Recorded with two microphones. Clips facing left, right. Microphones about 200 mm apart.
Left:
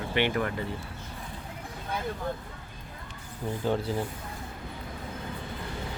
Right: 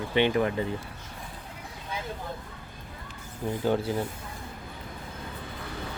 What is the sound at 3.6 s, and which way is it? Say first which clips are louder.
Speech: right 2 dB; centre (ahead or behind).